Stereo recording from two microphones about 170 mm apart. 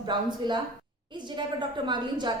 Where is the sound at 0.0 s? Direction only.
25° right (ahead or behind).